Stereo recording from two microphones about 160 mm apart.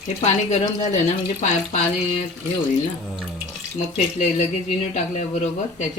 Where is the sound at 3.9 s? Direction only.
45° left (ahead or behind).